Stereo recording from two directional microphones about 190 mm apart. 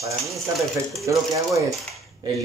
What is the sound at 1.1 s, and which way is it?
Speech, 15° right (ahead or behind).